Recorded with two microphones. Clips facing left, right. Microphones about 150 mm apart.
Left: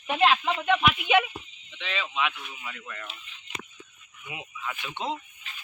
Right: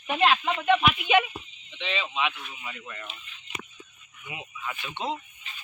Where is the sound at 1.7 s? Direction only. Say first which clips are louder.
Right 2 dB; 20° right (ahead or behind).